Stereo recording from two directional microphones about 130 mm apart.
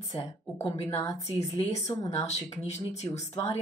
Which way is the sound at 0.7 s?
50° left (ahead or behind).